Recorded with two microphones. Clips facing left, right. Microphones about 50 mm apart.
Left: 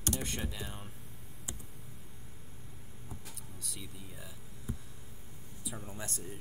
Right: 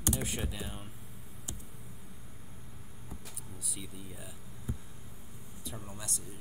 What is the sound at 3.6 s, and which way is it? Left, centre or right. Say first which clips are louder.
Speech: right 2 dB; centre.